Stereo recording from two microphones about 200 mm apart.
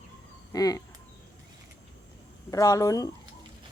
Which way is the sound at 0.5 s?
20° left (ahead or behind).